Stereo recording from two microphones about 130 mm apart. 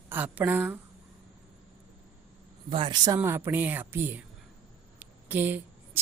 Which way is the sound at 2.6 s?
45° right (ahead or behind).